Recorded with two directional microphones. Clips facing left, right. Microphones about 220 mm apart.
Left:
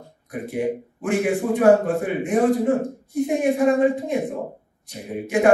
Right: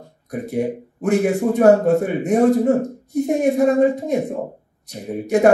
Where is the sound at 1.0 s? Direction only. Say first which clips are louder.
Right 4 dB; 40° right (ahead or behind).